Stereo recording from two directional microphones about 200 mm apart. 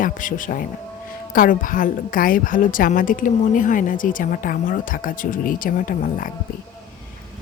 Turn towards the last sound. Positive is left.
turn(degrees=45)  # may be behind; listen again after turning